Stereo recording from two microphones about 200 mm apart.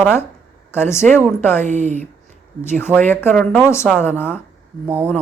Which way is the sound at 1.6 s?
35° right (ahead or behind).